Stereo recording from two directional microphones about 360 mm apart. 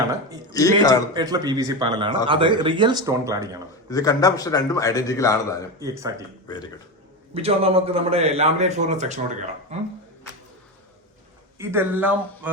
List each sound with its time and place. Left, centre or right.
0.5 s a man's voice: centre
1.1 s a man's voice: centre
3.8 s a man's voice: centre
5.8 s a man's voice: centre
7.3 s a man's voice: centre
11.5 s a man's voice: centre